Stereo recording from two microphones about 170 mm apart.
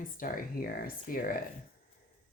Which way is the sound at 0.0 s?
55° left (ahead or behind).